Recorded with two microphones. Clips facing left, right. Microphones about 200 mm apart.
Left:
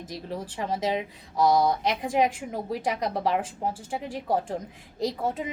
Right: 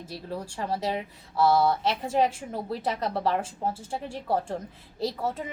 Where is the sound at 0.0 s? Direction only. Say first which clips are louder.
Left 1 dB; 15° left (ahead or behind).